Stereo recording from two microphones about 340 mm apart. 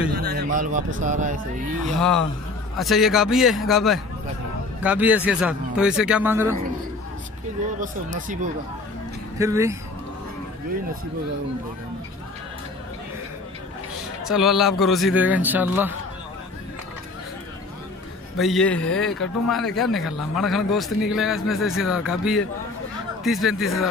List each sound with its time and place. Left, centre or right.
0.1 s a sound: right
0.9 s speech: right
2.0 s a man's voice: centre
7.8 s speech: right
9.4 s speech: centre
14.2 s a man's voice: centre
18.4 s a man's voice: centre